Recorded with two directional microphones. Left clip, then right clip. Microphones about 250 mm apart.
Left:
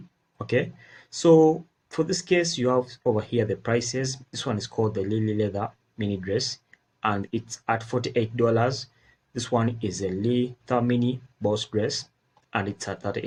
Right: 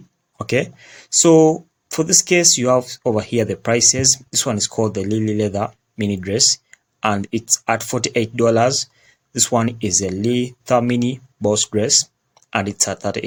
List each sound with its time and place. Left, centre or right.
0.3 s speech: right